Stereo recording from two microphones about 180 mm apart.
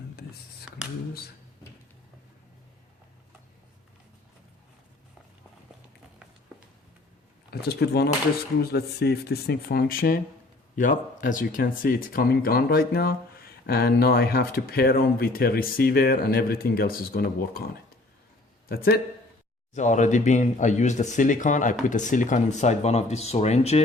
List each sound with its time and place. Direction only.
7.5 s speech: 60° left (ahead or behind)
18.7 s speech: 55° left (ahead or behind)
19.7 s speech: 40° left (ahead or behind)